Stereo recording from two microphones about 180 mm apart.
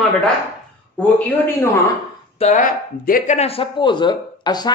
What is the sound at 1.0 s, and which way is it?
Speech, 10° left (ahead or behind).